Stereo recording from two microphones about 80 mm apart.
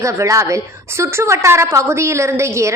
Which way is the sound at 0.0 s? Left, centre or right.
Right.